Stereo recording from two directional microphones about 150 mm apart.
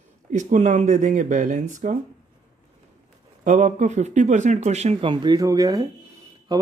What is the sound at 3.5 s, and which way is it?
Speech, 55° right (ahead or behind).